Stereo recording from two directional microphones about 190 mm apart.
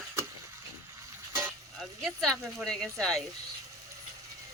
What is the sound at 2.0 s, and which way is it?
A woman's voice, centre (ahead or behind).